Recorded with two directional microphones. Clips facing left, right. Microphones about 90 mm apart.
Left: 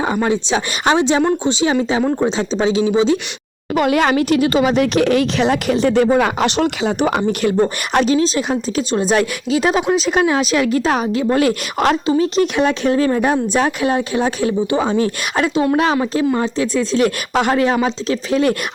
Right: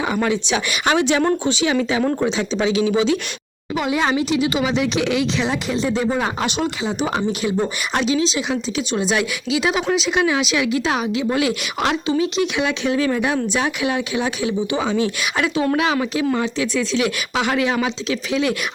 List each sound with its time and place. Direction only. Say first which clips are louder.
0.2 s speech: left 3 dB; 35° left (ahead or behind)
3.8 s speech: left 5 dB; 60° left (ahead or behind)
7.4 s speech: left 5 dB; 50° left (ahead or behind)